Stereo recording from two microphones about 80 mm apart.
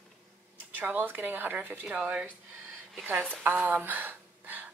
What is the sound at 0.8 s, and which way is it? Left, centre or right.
A woman's voice, right.